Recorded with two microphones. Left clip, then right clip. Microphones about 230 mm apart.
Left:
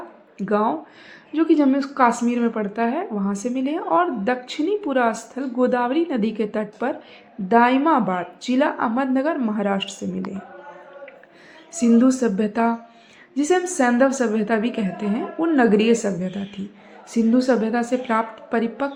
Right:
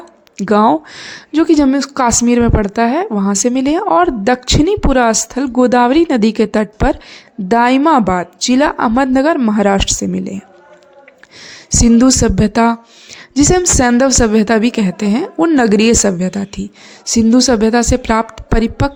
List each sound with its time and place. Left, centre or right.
0.3 s a woman's voice: right
11.8 s a woman's voice: right